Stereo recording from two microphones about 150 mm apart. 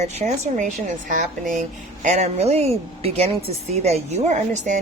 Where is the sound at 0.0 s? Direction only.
50° right (ahead or behind).